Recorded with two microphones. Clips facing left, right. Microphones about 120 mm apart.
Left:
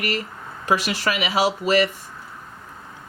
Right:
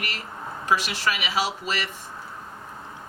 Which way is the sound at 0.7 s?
45° left (ahead or behind).